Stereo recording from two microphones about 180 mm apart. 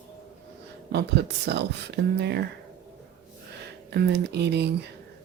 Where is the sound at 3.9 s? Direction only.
65° right (ahead or behind).